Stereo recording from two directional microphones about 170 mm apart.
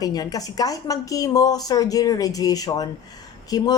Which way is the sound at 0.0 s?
20° left (ahead or behind).